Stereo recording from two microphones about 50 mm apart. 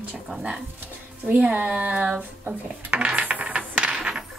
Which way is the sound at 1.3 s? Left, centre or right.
Right.